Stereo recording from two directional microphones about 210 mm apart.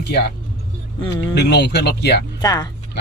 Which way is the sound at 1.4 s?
50° left (ahead or behind).